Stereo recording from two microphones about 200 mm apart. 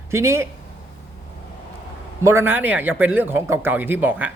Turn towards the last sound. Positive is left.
turn(degrees=-10)  # may be behind; listen again after turning